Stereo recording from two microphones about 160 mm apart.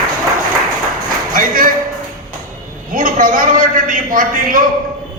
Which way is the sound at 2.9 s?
60° right (ahead or behind).